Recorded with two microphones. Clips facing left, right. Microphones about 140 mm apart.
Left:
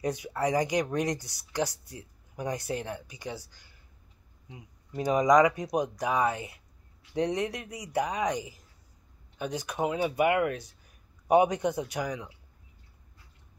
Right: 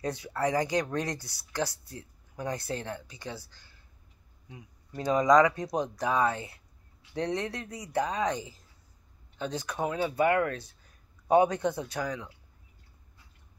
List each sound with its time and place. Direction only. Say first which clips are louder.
0.0 s speech: left 1 dB; 15° left (ahead or behind)